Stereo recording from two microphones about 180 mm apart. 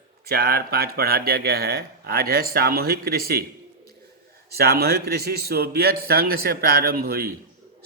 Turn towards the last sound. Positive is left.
turn(degrees=-55)  # may be behind; listen again after turning